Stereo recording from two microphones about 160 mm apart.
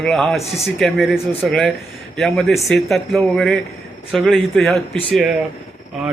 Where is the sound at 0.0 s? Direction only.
5° left (ahead or behind).